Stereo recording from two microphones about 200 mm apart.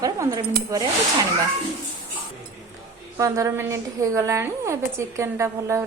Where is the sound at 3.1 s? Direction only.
15° right (ahead or behind).